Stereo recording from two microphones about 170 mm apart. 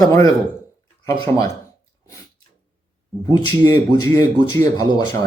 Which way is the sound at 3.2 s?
25° left (ahead or behind).